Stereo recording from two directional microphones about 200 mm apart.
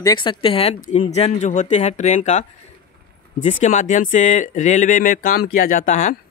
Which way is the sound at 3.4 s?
35° left (ahead or behind).